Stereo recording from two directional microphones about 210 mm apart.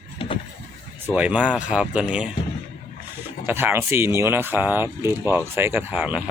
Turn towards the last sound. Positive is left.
turn(degrees=-5)  # may be behind; listen again after turning